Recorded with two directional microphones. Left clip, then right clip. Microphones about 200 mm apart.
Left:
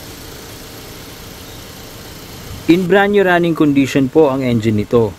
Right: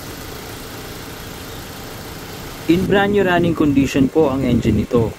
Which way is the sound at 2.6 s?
25° left (ahead or behind).